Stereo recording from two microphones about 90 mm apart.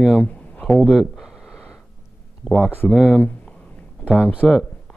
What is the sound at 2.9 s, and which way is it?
Speech, 10° right (ahead or behind).